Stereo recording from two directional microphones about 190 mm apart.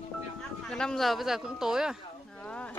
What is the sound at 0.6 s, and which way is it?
Speech, 5° left (ahead or behind).